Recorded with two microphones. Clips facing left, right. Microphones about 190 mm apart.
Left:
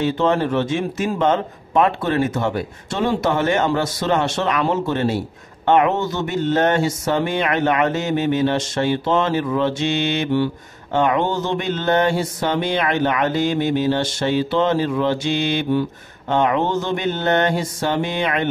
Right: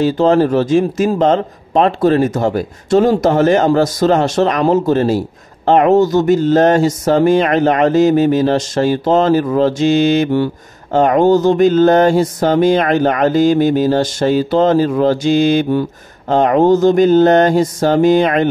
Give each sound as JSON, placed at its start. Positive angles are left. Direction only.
{"t": 0.0, "sound": "speech", "side_deg": -35}